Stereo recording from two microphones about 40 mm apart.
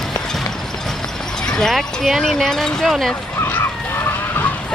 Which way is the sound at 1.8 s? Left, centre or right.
Centre.